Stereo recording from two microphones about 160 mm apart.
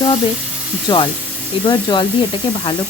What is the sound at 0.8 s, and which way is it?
Speech, 30° left (ahead or behind).